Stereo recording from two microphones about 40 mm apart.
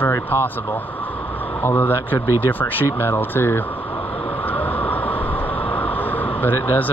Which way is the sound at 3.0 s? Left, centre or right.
Left.